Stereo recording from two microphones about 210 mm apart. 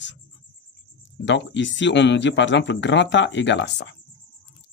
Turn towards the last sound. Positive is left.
turn(degrees=55)  # may be behind; listen again after turning